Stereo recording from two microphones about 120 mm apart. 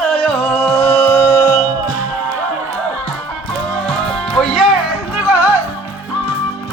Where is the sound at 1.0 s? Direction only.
15° left (ahead or behind).